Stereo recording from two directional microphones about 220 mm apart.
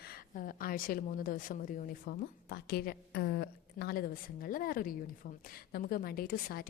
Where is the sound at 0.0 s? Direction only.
40° left (ahead or behind).